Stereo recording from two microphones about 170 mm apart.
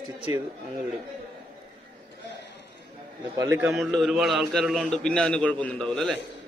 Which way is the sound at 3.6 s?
Centre (ahead or behind).